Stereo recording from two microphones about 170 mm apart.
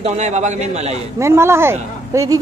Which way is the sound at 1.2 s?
15° right (ahead or behind).